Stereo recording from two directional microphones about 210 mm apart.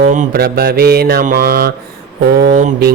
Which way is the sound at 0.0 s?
40° right (ahead or behind).